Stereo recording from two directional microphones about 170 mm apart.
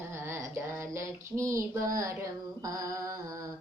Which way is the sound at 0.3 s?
15° right (ahead or behind).